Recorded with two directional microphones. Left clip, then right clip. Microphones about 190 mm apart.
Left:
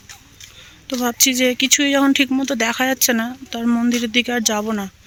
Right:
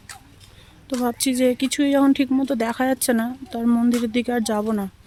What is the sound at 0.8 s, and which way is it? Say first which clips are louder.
Speech: left 5 dB; 5° right (ahead or behind).